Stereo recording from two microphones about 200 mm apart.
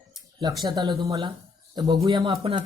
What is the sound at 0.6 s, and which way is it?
Speech, 20° right (ahead or behind).